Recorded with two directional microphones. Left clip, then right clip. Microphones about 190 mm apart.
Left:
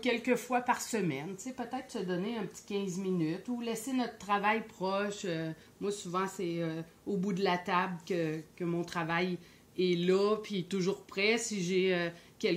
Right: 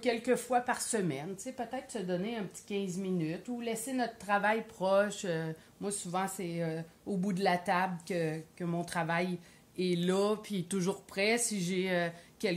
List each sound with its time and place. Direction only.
0.0 s speech: 10° right (ahead or behind)
4.4 s speech: 30° right (ahead or behind)